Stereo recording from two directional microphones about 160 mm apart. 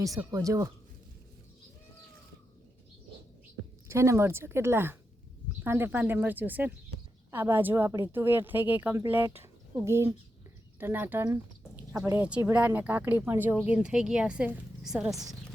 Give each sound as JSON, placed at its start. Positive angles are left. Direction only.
{"t": 0.3, "sound": "speech", "side_deg": -20}
{"t": 3.8, "sound": "speech", "side_deg": -15}